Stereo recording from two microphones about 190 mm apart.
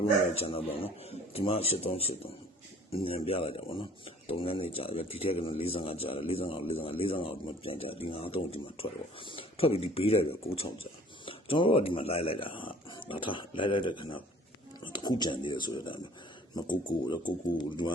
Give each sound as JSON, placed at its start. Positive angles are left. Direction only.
{"t": 0.3, "sound": "a man's voice", "side_deg": 30}